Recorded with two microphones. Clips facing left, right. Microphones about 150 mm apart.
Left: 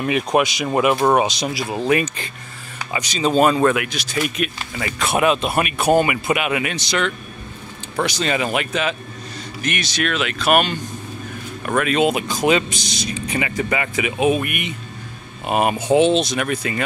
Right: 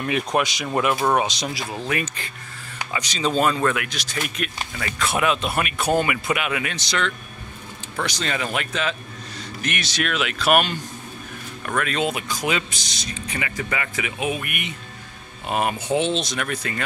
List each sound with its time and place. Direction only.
0.0 s speech: 5° left (ahead or behind)
1.9 s speech: 20° left (ahead or behind)
3.0 s speech: 10° left (ahead or behind)
9.6 s speech: centre (ahead or behind)
11.6 s speech: 15° left (ahead or behind)
12.6 s speech: 15° left (ahead or behind)